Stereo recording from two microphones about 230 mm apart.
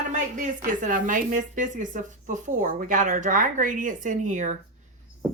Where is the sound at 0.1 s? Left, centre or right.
Right.